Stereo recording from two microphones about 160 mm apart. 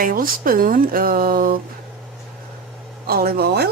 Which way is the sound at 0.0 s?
60° right (ahead or behind).